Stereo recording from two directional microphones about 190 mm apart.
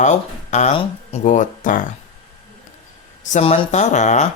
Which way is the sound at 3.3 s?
35° left (ahead or behind).